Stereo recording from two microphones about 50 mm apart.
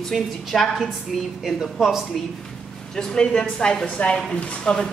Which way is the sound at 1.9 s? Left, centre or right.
Centre.